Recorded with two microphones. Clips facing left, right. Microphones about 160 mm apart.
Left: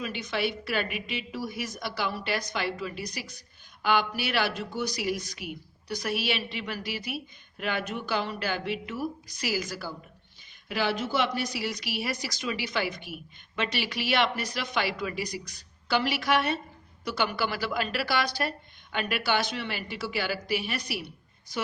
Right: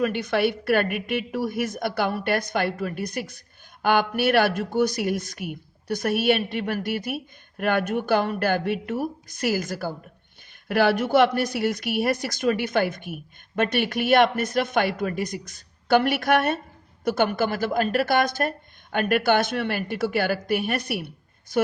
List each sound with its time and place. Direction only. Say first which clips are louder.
0.0 s a woman's voice: right 8 dB; 60° right (ahead or behind)